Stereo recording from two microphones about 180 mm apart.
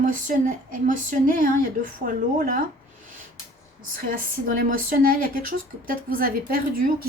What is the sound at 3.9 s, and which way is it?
A woman's voice, 50° right (ahead or behind).